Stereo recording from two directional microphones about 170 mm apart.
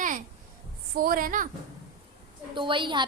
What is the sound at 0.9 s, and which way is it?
Speech, 55° right (ahead or behind).